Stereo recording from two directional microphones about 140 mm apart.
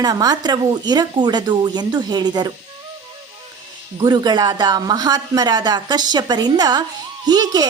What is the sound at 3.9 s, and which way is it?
A woman's voice, 30° right (ahead or behind).